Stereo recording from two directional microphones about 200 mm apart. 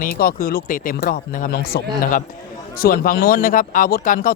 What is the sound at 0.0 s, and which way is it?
A man's voice, 45° left (ahead or behind).